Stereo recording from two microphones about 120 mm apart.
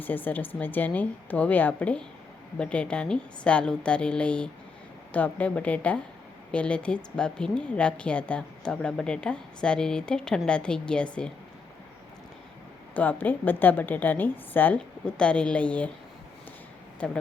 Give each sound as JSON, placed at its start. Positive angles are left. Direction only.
{"t": 0.0, "sound": "speech", "side_deg": 15}
{"t": 12.9, "sound": "speech", "side_deg": 15}
{"t": 17.0, "sound": "speech", "side_deg": 5}